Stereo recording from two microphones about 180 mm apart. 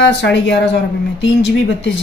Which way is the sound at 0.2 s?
75° left (ahead or behind).